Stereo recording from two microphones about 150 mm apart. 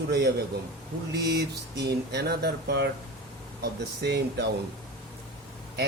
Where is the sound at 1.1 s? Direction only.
90° right.